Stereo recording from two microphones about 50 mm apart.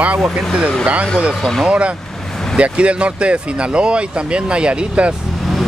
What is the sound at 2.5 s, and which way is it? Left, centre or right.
Speech, right.